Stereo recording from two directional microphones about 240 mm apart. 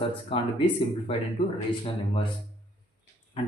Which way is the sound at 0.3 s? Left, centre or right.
Left.